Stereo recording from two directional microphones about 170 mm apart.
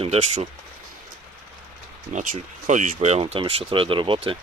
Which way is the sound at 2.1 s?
50° right (ahead or behind).